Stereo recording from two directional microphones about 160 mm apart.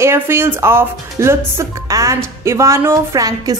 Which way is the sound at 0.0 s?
15° right (ahead or behind).